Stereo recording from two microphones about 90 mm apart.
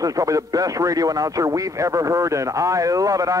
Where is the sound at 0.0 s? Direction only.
40° right (ahead or behind).